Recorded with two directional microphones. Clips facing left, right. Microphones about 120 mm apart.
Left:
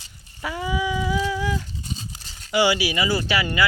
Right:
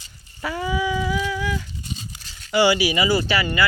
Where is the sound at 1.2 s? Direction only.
30° left (ahead or behind).